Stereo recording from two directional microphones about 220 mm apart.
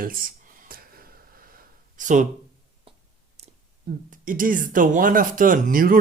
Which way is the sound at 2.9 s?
25° right (ahead or behind).